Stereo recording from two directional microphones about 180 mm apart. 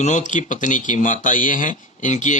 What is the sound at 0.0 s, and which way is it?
Speech, 45° left (ahead or behind).